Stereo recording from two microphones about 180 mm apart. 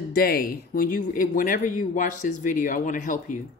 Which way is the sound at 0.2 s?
55° left (ahead or behind).